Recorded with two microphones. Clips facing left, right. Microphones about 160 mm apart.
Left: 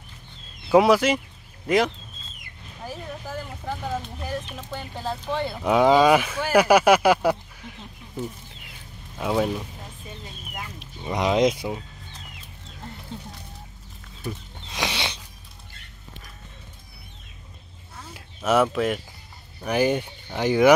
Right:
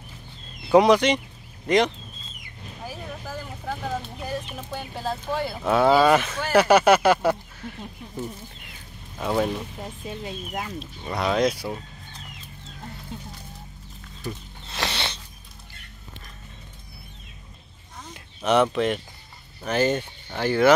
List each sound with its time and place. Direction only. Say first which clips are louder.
0.7 s speech: even; 5° left (ahead or behind)
4.2 s speech: even; 15° right (ahead or behind)
5.6 s speech: left 1 dB; 15° left (ahead or behind)
9.2 s speech: even; 5° left (ahead or behind)
10.8 s speech: left 5 dB; 15° left (ahead or behind)
14.2 s a sound: left 1 dB; 10° left (ahead or behind)
18.0 s a sound: even; 5° left (ahead or behind)
19.6 s speech: left 1 dB; 10° left (ahead or behind)